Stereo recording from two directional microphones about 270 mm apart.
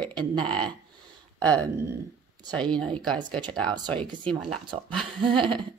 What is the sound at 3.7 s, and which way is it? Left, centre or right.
Speech, centre.